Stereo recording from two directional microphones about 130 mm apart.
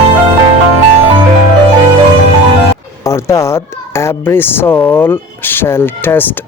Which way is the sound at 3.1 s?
20° left (ahead or behind).